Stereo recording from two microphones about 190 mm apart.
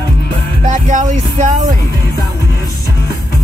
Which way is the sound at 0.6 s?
40° right (ahead or behind).